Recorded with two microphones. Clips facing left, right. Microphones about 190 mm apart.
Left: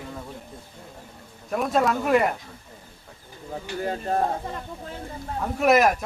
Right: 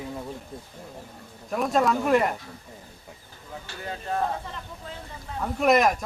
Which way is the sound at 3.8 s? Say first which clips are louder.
Left 3 dB; 40° left (ahead or behind).